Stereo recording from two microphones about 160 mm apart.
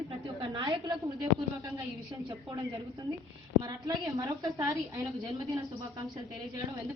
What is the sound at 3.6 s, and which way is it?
A woman's voice, 25° right (ahead or behind).